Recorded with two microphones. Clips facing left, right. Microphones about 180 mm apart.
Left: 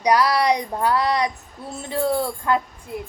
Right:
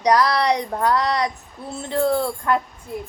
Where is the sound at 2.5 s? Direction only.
20° left (ahead or behind).